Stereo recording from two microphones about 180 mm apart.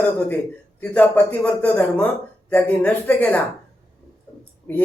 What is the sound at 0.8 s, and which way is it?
A man's voice, 10° left (ahead or behind).